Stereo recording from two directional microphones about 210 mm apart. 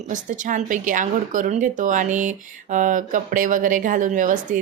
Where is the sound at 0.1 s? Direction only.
35° right (ahead or behind).